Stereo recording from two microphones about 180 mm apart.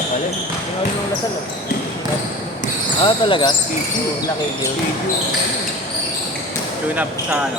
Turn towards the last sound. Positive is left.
turn(degrees=-10)  # may be behind; listen again after turning